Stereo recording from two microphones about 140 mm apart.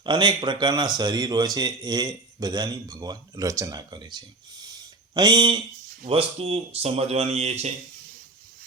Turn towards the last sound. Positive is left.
turn(degrees=-50)  # may be behind; listen again after turning